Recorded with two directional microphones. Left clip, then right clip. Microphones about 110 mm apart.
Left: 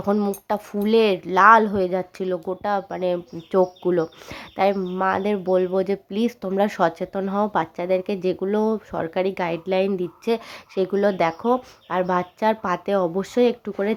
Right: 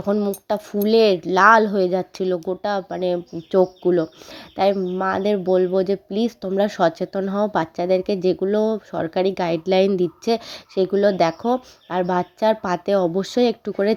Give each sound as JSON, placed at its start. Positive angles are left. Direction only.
{"t": 0.0, "sound": "speech", "side_deg": -5}
{"t": 0.4, "sound": "speech", "side_deg": -20}
{"t": 3.5, "sound": "speech", "side_deg": -15}
{"t": 9.0, "sound": "speech", "side_deg": -25}
{"t": 9.7, "sound": "speech", "side_deg": -45}
{"t": 10.5, "sound": "speech", "side_deg": -20}